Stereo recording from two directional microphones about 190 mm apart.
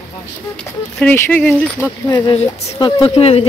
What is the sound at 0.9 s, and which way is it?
Speech, 10° left (ahead or behind).